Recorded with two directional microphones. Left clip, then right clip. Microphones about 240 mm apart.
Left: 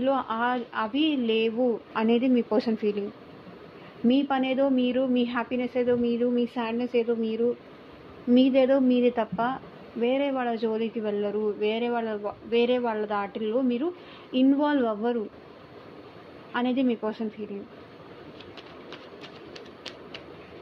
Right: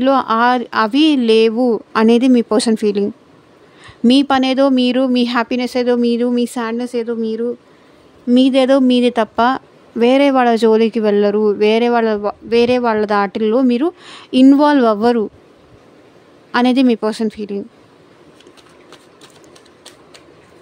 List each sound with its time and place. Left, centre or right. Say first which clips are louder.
0.0 s speech: right 13 dB; right
4.1 s a woman's voice: right 12 dB; right
16.5 s speech: right 13 dB; right